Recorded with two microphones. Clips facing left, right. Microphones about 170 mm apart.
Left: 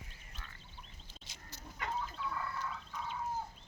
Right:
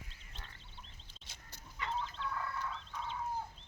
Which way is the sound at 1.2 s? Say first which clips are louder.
Left 2 dB; 55° right (ahead or behind).